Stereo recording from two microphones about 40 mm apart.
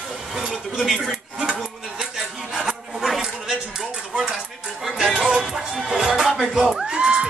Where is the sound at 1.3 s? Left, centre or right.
Centre.